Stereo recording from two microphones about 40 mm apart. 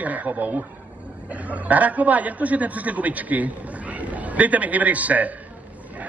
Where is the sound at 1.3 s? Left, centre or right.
Right.